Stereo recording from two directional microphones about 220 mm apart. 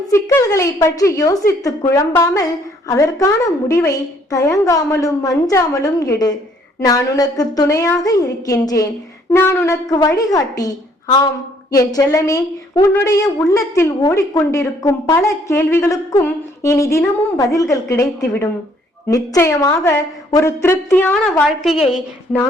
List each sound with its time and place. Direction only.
0.1 s a woman's voice: 15° left (ahead or behind)
11.7 s a woman's voice: 15° left (ahead or behind); by 21.8 s centre (ahead or behind)